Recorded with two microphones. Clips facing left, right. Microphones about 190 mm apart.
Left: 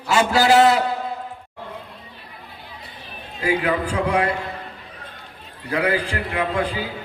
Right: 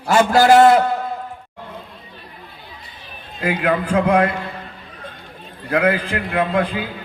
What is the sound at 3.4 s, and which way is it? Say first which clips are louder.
Speech: right 2 dB; 55° right (ahead or behind).